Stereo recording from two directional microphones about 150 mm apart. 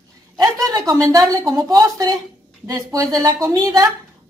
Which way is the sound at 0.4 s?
25° right (ahead or behind).